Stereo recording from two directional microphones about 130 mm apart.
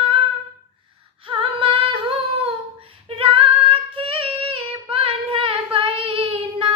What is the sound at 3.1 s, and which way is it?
Child singing, 40° right (ahead or behind).